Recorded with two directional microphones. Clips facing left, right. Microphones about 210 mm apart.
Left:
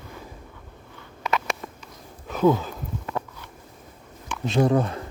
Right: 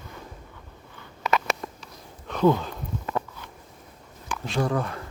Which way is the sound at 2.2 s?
5° left (ahead or behind).